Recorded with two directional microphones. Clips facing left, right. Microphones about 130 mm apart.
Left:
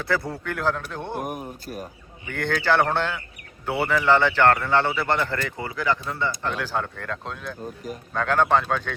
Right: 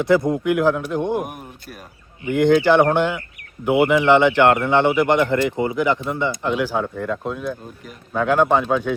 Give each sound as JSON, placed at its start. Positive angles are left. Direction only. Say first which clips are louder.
{"t": 0.0, "sound": "a man's voice", "louder": "right 10 dB", "side_deg": -20}
{"t": 2.2, "sound": "a man's voice", "louder": "right 10 dB", "side_deg": -15}